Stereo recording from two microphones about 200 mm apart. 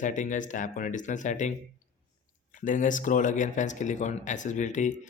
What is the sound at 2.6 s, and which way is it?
Speech, 40° left (ahead or behind).